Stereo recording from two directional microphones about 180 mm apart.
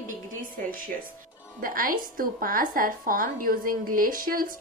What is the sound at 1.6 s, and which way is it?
A woman's voice, 50° right (ahead or behind).